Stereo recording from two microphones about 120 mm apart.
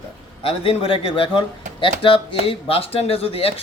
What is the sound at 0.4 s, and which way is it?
Speech, 50° left (ahead or behind).